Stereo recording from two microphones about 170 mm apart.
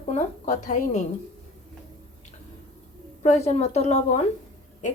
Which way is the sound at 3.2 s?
40° left (ahead or behind).